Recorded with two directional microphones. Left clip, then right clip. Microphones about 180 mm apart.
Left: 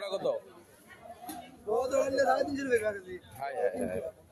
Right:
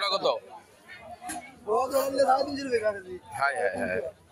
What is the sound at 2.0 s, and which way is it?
Speech, 65° left (ahead or behind).